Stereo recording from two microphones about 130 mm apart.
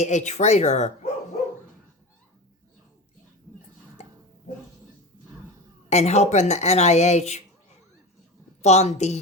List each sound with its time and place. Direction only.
0.0 s speech: 65° left (ahead or behind)
5.9 s speech: 55° left (ahead or behind)
8.6 s speech: 60° left (ahead or behind)